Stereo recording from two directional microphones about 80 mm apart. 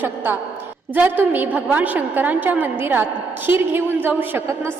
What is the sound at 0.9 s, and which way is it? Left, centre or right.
A woman's voice, right.